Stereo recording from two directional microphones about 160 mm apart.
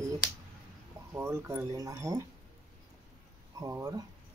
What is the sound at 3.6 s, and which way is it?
Speech, 20° right (ahead or behind).